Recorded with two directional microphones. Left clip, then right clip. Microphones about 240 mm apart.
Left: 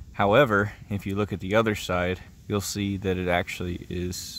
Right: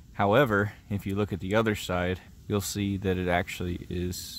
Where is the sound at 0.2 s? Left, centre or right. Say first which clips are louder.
Left 3 dB; centre.